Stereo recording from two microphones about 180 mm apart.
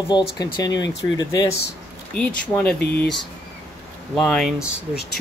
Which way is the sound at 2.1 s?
5° left (ahead or behind).